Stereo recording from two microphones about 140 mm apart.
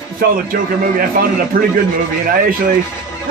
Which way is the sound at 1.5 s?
90° right.